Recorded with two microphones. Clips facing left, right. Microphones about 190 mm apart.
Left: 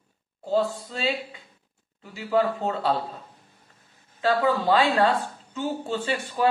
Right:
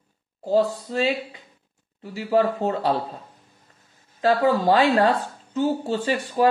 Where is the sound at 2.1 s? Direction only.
35° right (ahead or behind).